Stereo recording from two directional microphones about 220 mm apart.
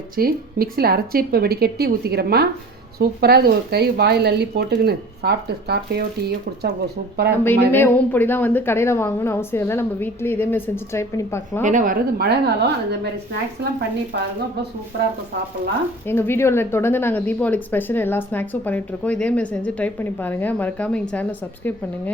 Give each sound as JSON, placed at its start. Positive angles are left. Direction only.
{"t": 0.2, "sound": "speech", "side_deg": -45}
{"t": 7.4, "sound": "a woman's voice", "side_deg": 10}
{"t": 11.6, "sound": "speech", "side_deg": -35}
{"t": 14.1, "sound": "speech", "side_deg": -50}
{"t": 16.0, "sound": "a woman's voice", "side_deg": 10}